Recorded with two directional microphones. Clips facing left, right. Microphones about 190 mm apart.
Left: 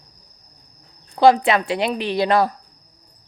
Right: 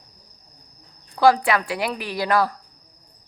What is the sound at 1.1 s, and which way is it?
A woman's voice, 20° left (ahead or behind).